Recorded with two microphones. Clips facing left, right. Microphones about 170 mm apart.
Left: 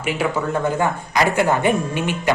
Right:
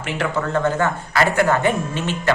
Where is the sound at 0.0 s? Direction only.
10° left (ahead or behind).